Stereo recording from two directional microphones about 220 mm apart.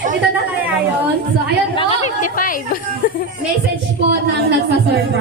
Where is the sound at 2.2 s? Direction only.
40° left (ahead or behind).